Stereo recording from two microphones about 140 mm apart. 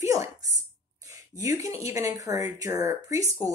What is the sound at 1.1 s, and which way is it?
Speech, 25° right (ahead or behind).